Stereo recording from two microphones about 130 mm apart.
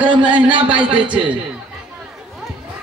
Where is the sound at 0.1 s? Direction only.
40° right (ahead or behind).